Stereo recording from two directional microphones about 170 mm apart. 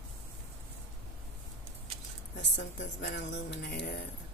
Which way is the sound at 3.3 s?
90° left.